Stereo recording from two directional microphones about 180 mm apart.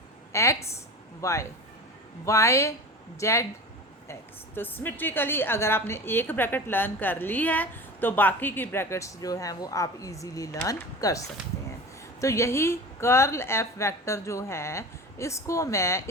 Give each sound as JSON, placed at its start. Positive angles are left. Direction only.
{"t": 0.3, "sound": "a woman's voice", "side_deg": 15}
{"t": 12.2, "sound": "a woman's voice", "side_deg": 15}